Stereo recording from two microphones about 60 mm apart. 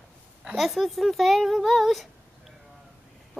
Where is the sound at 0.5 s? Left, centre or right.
Centre.